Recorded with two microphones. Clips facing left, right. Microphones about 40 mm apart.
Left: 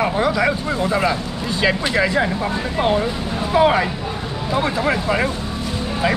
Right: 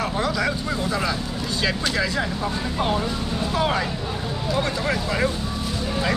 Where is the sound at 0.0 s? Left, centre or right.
Left.